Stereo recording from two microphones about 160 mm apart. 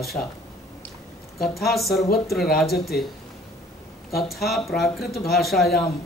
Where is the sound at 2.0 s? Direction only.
75° left (ahead or behind).